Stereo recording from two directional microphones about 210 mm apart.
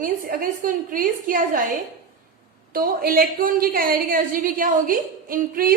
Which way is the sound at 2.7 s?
45° right (ahead or behind).